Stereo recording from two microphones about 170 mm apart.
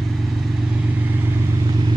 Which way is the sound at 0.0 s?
Centre (ahead or behind).